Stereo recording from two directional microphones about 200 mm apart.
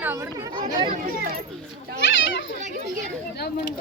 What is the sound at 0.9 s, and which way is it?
Speech, 45° right (ahead or behind).